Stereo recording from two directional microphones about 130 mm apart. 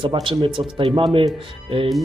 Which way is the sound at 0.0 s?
40° right (ahead or behind).